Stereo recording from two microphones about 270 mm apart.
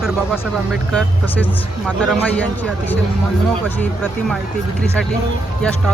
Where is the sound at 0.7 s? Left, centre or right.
Centre.